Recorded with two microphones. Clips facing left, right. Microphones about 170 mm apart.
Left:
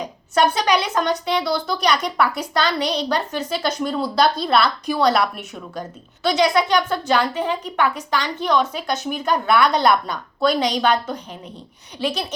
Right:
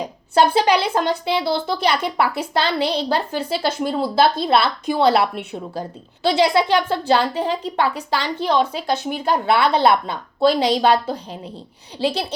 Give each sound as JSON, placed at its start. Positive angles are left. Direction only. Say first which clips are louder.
{"t": 0.0, "sound": "a woman's voice", "louder": "right 2 dB", "side_deg": -30}